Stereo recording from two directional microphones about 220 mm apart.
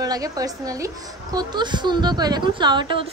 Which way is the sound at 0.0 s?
15° right (ahead or behind).